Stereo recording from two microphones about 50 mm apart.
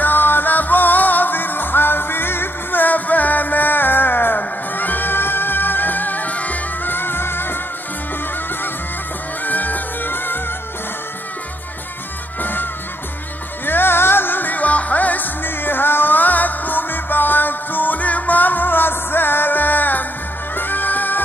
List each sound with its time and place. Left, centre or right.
0.0 s music: left
9.4 s music: left
12.4 s music: left
13.7 s music: left